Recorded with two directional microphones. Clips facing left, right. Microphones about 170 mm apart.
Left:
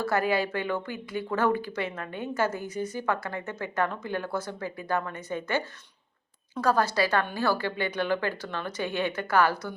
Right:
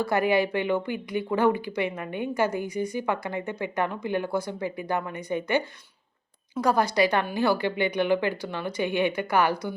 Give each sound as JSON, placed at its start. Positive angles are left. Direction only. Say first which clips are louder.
{"t": 0.0, "sound": "a woman's voice", "louder": "right 3 dB", "side_deg": -15}